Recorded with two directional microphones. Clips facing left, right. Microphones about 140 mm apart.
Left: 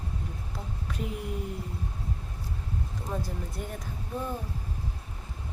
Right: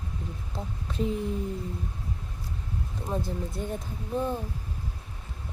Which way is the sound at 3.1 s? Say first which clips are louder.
Right 4 dB; 25° right (ahead or behind).